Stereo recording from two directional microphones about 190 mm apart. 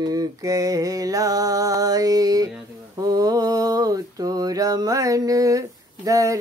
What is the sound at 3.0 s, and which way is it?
Mantra, 20° right (ahead or behind).